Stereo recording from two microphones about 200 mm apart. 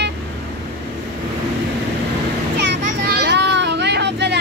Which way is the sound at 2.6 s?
55° right (ahead or behind).